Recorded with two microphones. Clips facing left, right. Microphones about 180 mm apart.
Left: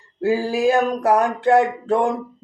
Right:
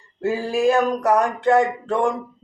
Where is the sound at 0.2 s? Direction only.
30° left (ahead or behind).